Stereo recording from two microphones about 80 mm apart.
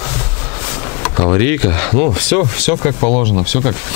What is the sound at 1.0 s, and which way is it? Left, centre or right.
Speech, centre.